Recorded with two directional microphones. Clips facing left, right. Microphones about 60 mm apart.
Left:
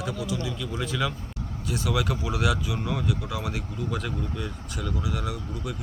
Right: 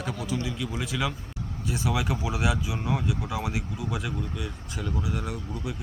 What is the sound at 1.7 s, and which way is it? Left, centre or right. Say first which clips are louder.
Speech: left 1 dB; right.